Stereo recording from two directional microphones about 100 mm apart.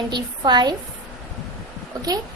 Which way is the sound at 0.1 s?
45° right (ahead or behind).